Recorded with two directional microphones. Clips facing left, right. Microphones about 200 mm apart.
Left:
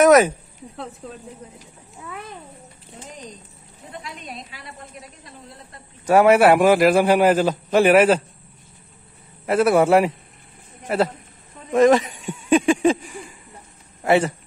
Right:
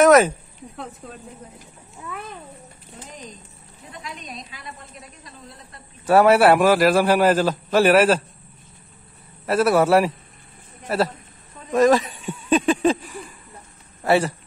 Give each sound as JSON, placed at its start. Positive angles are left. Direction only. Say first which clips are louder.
{"t": 0.0, "sound": "a man's voice", "louder": "even", "side_deg": 10}
{"t": 6.0, "sound": "a man's voice", "louder": "left 1 dB", "side_deg": 15}
{"t": 9.5, "sound": "a man's voice", "louder": "left 1 dB", "side_deg": 20}